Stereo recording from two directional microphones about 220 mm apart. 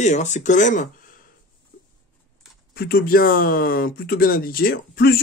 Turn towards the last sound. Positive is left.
turn(degrees=45)  # may be behind; listen again after turning